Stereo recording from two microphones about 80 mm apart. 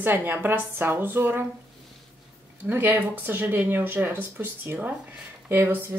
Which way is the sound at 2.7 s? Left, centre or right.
Right.